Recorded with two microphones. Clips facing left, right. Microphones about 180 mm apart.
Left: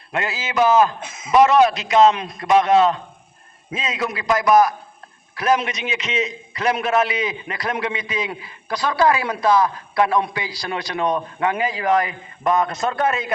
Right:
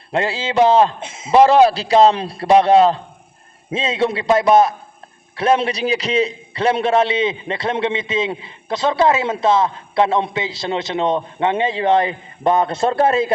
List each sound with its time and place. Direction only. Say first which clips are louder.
0.1 s a man's voice: right 5 dB; 30° right (ahead or behind)